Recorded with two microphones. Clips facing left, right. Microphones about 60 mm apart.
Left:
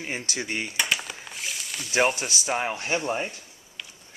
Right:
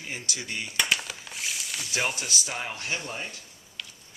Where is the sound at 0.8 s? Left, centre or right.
Centre.